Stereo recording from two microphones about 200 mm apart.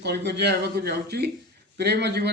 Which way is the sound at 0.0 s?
55° right (ahead or behind).